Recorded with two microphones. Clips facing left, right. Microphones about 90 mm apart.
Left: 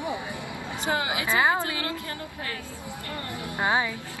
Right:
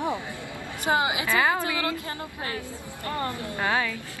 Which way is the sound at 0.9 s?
20° right (ahead or behind).